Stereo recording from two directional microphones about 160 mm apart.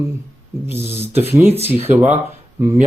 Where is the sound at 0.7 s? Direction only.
15° right (ahead or behind).